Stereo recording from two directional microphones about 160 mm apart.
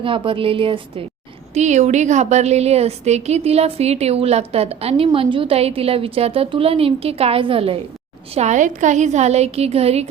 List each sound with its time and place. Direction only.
0.0 s a woman's voice: 35° right (ahead or behind)
1.5 s a woman's voice: 45° right (ahead or behind)
8.4 s a woman's voice: 50° right (ahead or behind)